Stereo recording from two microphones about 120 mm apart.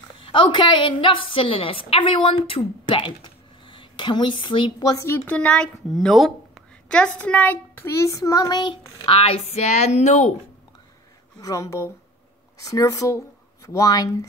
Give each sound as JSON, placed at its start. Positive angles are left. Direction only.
{"t": 0.2, "sound": "a woman's voice", "side_deg": 45}
{"t": 9.0, "sound": "speech", "side_deg": 50}
{"t": 11.4, "sound": "speech", "side_deg": 25}